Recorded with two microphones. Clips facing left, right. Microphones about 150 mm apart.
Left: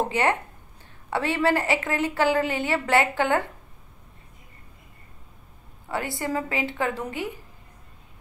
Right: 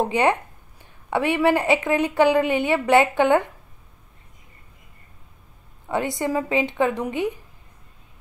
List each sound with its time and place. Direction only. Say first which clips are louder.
0.0 s a woman's voice: right 4 dB; 15° right (ahead or behind)
5.9 s a woman's voice: right 5 dB; 20° right (ahead or behind)